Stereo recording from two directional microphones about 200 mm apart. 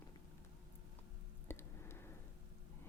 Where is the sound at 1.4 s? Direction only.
10° left (ahead or behind).